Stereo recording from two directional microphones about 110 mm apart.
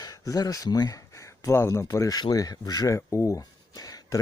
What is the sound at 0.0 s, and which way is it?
Speech, 35° left (ahead or behind).